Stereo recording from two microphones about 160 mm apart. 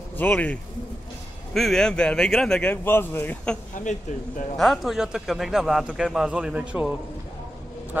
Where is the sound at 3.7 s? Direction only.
50° left (ahead or behind).